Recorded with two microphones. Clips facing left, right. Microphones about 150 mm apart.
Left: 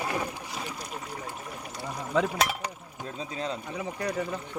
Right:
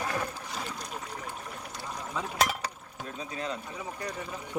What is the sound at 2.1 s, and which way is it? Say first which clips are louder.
Speech: left 11 dB; 90° left.